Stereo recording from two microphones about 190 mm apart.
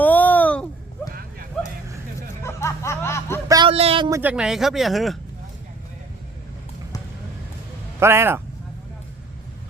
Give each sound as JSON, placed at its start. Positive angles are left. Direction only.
{"t": 0.0, "sound": "a sound", "side_deg": 10}
{"t": 2.4, "sound": "snicker", "side_deg": 15}
{"t": 3.5, "sound": "vehicle", "side_deg": -25}
{"t": 4.1, "sound": "speech", "side_deg": -10}
{"t": 7.9, "sound": "speech", "side_deg": -15}